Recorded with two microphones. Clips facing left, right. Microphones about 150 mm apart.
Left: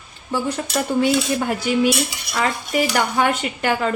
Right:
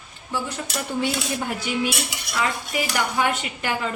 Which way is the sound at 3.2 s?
55° left (ahead or behind).